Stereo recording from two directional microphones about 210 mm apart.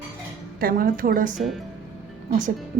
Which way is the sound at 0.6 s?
45° right (ahead or behind).